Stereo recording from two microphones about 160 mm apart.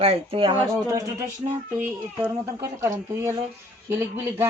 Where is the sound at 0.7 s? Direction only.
20° right (ahead or behind).